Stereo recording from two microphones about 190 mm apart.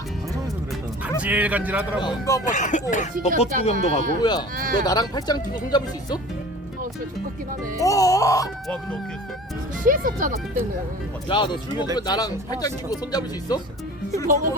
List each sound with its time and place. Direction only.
1.2 s a man's voice: 5° right (ahead or behind)
2.0 s speech: 20° left (ahead or behind)
2.4 s speech: 40° left (ahead or behind)
4.2 s speech: 20° left (ahead or behind)
7.8 s music: 15° left (ahead or behind)
8.6 s speech: 5° left (ahead or behind)
9.8 s speech: 45° right (ahead or behind)
11.3 s speech: 25° left (ahead or behind)